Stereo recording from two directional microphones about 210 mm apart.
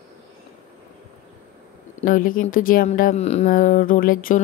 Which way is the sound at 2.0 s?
40° left (ahead or behind).